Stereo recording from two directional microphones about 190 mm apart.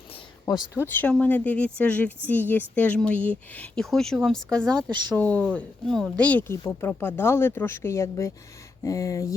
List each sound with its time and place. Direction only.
0.8 s speech: 10° left (ahead or behind)